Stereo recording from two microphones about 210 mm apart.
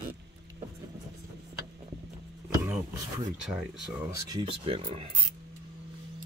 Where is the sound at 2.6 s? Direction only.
5° right (ahead or behind).